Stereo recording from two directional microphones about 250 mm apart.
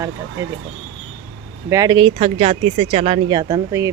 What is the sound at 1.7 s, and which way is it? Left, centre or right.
Speech, centre.